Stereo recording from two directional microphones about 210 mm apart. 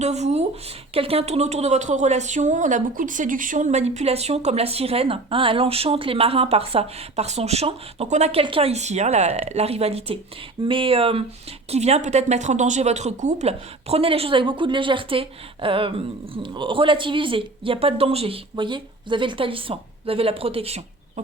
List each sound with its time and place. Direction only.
0.0 s a woman's voice: 30° right (ahead or behind)